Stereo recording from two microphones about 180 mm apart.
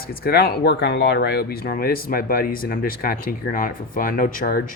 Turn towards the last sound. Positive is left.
turn(degrees=50)  # may be behind; listen again after turning